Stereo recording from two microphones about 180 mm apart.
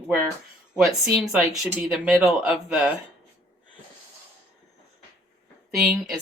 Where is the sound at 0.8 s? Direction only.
Centre (ahead or behind).